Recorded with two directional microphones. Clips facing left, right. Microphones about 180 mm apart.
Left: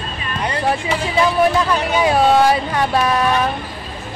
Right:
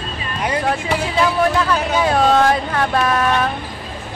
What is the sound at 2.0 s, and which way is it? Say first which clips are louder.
Speech: left 2 dB; 10° left (ahead or behind).